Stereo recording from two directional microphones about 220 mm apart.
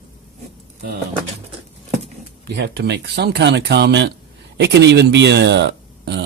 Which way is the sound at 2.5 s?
50° right (ahead or behind).